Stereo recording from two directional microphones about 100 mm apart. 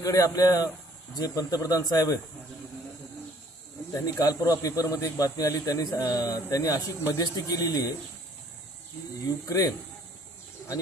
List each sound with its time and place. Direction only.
0.0 s a man's voice: 35° left (ahead or behind)
3.9 s a man's voice: 35° left (ahead or behind)